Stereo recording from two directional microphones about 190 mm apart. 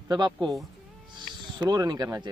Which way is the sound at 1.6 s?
20° right (ahead or behind).